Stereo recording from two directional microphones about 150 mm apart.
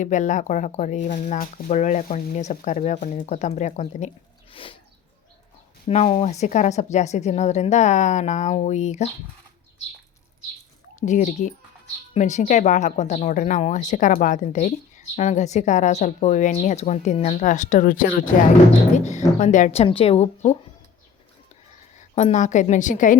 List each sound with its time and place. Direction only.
0.0 s speech: 55° left (ahead or behind)
4.5 s a sound: 35° left (ahead or behind)
5.9 s speech: 45° left (ahead or behind)
11.0 s speech: 55° left (ahead or behind)
18.9 s speech: 50° left (ahead or behind)
22.1 s speech: 50° left (ahead or behind)